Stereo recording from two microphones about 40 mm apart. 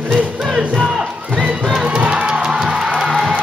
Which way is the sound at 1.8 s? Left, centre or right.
Right.